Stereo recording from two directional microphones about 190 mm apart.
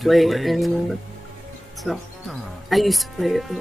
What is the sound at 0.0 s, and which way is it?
Speech, centre (ahead or behind).